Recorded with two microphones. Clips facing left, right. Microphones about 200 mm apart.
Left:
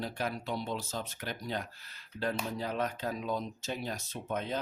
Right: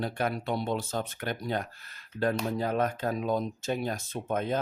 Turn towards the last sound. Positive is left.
turn(degrees=-50)  # may be behind; listen again after turning